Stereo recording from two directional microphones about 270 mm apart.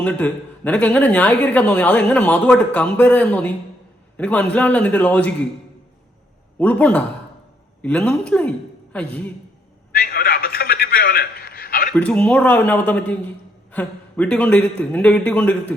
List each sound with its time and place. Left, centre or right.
0.0 s speech: centre
6.6 s a woman's voice: centre
10.0 s a man's voice: left
11.9 s speech: centre